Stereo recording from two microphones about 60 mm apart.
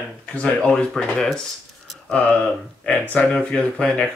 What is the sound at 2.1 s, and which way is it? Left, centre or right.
Speech, centre.